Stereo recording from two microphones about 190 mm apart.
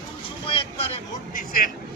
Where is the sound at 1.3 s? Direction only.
50° left (ahead or behind).